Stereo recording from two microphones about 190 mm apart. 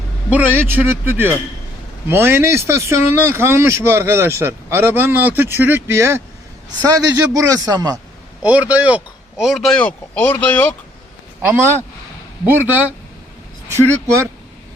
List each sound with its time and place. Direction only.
0.3 s a man's voice: 10° right (ahead or behind)
8.4 s speech: 5° right (ahead or behind); by 10.8 s 10° left (ahead or behind)
11.4 s speech: 10° right (ahead or behind)
13.7 s speech: 15° right (ahead or behind)